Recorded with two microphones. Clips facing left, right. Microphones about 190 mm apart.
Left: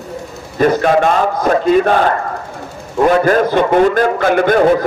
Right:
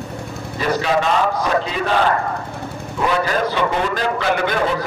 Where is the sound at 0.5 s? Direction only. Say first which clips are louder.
Left 7 dB; 50° left (ahead or behind).